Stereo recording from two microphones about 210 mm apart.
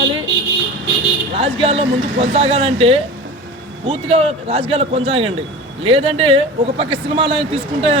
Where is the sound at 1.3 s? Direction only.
30° right (ahead or behind).